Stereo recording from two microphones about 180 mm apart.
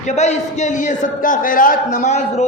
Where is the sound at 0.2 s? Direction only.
40° left (ahead or behind).